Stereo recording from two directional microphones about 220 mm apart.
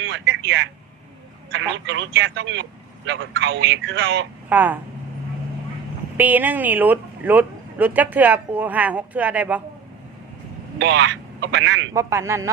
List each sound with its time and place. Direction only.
0.0 s speech: 55° right (ahead or behind)
4.4 s speech: 10° right (ahead or behind)
6.1 s speech: 10° right (ahead or behind)
10.8 s speech: 55° right (ahead or behind)
11.9 s speech: 15° right (ahead or behind)